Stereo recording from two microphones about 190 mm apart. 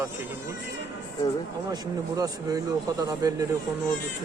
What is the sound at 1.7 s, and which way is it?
Speech, 20° right (ahead or behind).